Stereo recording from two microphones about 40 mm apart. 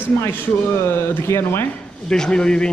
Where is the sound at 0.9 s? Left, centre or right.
Left.